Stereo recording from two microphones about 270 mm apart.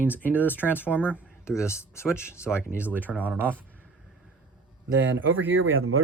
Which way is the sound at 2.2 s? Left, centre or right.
Centre.